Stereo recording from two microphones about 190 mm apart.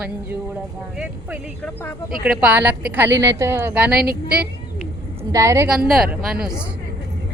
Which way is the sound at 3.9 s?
55° right (ahead or behind).